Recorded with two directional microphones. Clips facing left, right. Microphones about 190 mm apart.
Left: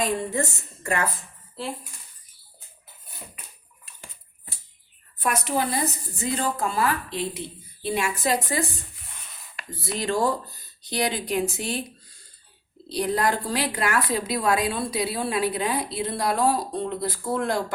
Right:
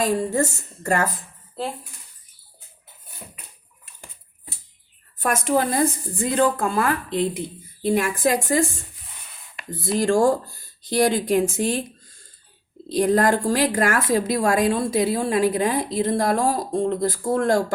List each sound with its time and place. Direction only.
0.0 s a woman's voice: 40° right (ahead or behind)
5.2 s a woman's voice: 45° right (ahead or behind)
9.6 s a woman's voice: 50° right (ahead or behind)